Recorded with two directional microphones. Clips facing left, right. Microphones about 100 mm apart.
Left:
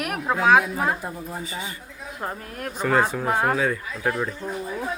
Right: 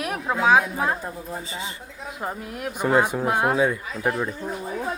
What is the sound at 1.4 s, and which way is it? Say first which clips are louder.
Speech: left 1 dB; 25° right (ahead or behind).